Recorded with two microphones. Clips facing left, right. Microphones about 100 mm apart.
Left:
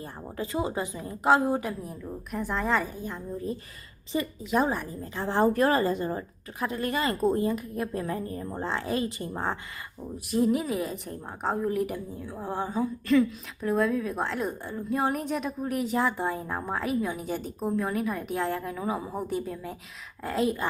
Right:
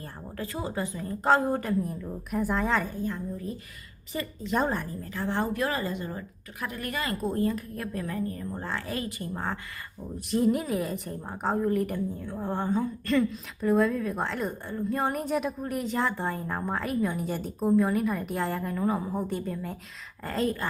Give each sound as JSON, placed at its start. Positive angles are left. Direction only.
{"t": 0.0, "sound": "a woman's voice", "side_deg": 20}
{"t": 3.0, "sound": "speech", "side_deg": 25}
{"t": 4.4, "sound": "a woman's voice", "side_deg": 5}
{"t": 4.9, "sound": "speech", "side_deg": 25}
{"t": 5.5, "sound": "speech", "side_deg": 40}
{"t": 10.3, "sound": "a woman's voice", "side_deg": 0}